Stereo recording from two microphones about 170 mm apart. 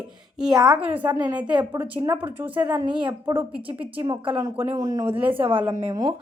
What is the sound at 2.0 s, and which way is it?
Speech, 25° right (ahead or behind).